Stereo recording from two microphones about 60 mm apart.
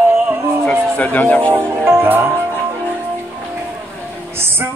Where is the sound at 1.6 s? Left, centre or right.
Right.